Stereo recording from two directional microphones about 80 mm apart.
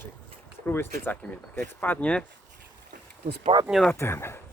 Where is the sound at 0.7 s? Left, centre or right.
Left.